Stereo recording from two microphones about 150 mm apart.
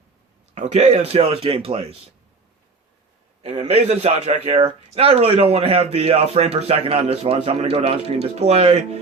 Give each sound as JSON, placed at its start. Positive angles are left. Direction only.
{"t": 0.5, "sound": "a man's voice", "side_deg": -45}
{"t": 3.4, "sound": "a man's voice", "side_deg": -40}